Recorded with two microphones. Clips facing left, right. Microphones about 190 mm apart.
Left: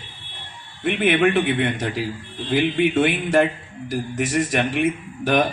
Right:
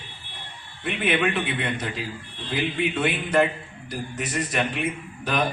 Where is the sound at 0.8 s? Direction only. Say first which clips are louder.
Left 6 dB; 50° left (ahead or behind).